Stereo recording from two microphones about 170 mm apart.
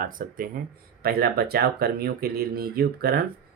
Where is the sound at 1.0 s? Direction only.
65° right (ahead or behind).